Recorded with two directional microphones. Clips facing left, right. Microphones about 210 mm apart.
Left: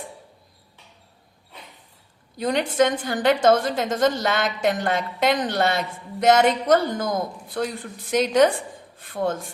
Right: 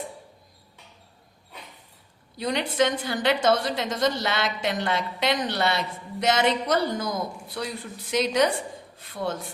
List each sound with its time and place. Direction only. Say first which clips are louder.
2.4 s a woman's voice: left 4 dB; 50° left (ahead or behind)